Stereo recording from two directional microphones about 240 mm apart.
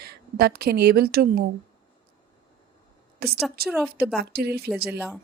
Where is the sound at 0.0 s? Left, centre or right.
Right.